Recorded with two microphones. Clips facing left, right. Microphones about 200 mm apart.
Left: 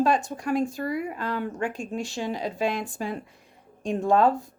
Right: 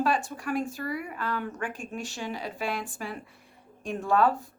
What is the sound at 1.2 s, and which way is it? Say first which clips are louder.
Speech: left 4 dB; 15° left (ahead or behind).